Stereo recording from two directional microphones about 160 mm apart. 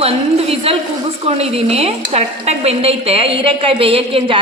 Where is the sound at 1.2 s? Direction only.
40° right (ahead or behind).